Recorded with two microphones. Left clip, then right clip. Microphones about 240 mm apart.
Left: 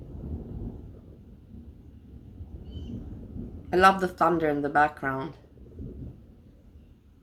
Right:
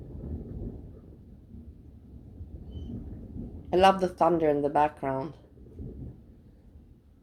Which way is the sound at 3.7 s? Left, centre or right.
Centre.